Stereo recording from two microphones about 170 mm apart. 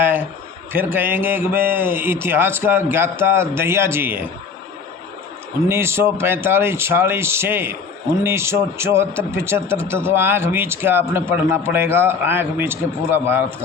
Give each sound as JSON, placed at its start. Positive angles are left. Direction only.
{"t": 0.0, "sound": "speech", "side_deg": -10}
{"t": 5.6, "sound": "speech", "side_deg": -15}